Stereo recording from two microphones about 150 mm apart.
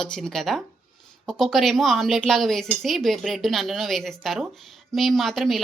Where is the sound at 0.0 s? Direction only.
5° left (ahead or behind).